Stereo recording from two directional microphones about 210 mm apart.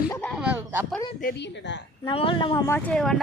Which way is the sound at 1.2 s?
55° left (ahead or behind).